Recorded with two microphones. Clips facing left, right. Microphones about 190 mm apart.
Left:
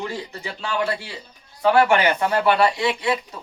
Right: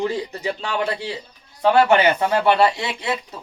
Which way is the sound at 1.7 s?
25° right (ahead or behind).